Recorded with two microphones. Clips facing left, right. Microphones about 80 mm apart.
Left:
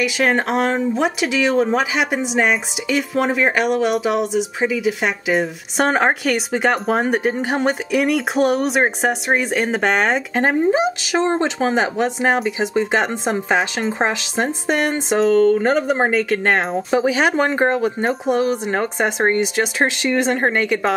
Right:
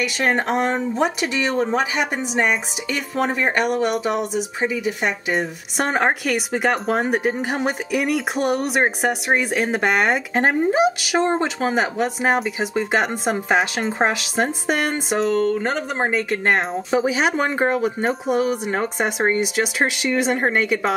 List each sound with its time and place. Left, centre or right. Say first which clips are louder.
0.0 s speech: left 3 dB; centre
20.5 s a woman's voice: left 1 dB; left